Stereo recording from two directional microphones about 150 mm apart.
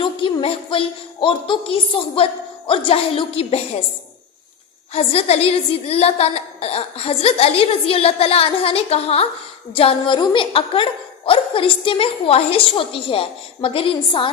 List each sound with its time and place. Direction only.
0.0 s a woman's voice: 35° left (ahead or behind)
4.9 s a woman's voice: 45° left (ahead or behind)